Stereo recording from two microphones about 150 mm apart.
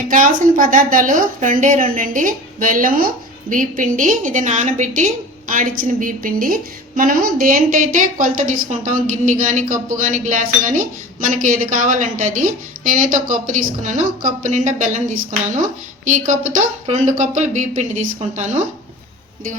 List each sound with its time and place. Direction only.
0.1 s a woman's voice: 65° right (ahead or behind)